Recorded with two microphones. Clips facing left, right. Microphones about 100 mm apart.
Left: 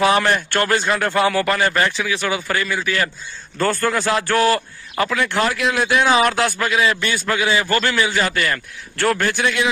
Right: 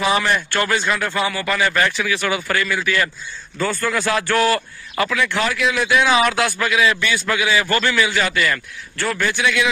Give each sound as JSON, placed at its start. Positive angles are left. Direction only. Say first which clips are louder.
{"t": 0.0, "sound": "speech", "louder": "left 2 dB", "side_deg": 55}
{"t": 1.7, "sound": "speech", "louder": "even", "side_deg": 30}
{"t": 3.5, "sound": "speech", "louder": "left 3 dB", "side_deg": 50}
{"t": 3.9, "sound": "a man's voice", "louder": "left 1 dB", "side_deg": 30}
{"t": 5.2, "sound": "speech", "louder": "left 1 dB", "side_deg": 45}
{"t": 6.0, "sound": "a man's voice", "louder": "left 1 dB", "side_deg": 30}
{"t": 9.1, "sound": "speech", "louder": "right 3 dB", "side_deg": 45}